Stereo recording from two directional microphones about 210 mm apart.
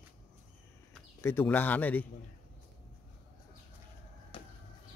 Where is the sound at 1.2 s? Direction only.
10° left (ahead or behind).